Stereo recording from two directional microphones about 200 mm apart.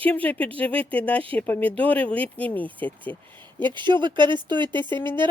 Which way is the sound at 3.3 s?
25° right (ahead or behind).